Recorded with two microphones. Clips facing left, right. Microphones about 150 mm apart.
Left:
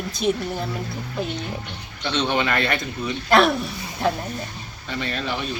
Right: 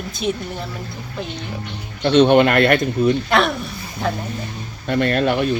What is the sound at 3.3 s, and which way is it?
Speech, centre (ahead or behind).